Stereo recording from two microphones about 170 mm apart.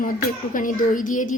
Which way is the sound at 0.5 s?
50° left (ahead or behind).